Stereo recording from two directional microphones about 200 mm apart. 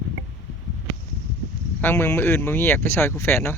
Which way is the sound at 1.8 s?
10° left (ahead or behind).